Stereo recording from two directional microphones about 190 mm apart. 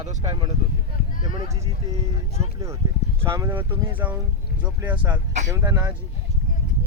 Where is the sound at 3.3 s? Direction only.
10° right (ahead or behind).